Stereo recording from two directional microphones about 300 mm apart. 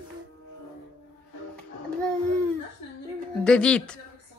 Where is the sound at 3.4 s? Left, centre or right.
Centre.